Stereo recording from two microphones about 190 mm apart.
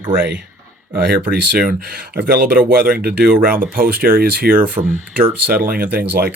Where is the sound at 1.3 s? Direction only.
55° right (ahead or behind).